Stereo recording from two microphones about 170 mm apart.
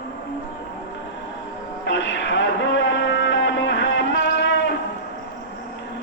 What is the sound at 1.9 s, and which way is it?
Music, 90° left.